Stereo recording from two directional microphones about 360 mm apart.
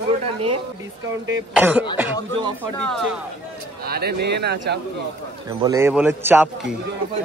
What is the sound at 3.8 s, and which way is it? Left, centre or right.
A man's voice, right.